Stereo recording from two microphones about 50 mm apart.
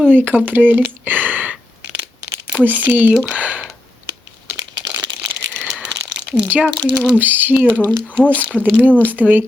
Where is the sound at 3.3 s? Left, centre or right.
Right.